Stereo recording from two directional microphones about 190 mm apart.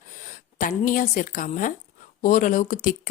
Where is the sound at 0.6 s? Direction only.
45° left (ahead or behind).